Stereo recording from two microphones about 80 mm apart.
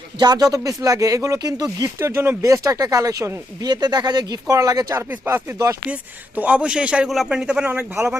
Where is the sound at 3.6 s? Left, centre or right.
Right.